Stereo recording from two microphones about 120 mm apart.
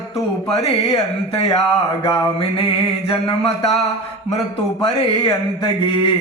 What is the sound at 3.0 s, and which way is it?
Mantra, 55° left (ahead or behind).